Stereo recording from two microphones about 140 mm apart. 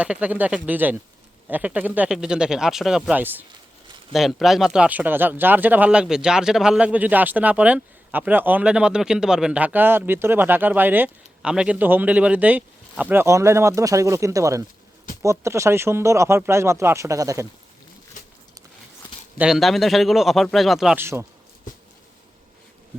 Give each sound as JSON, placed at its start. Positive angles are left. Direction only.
{"t": 0.0, "sound": "speech", "side_deg": -10}
{"t": 19.4, "sound": "speech", "side_deg": 0}
{"t": 20.9, "sound": "speech", "side_deg": -15}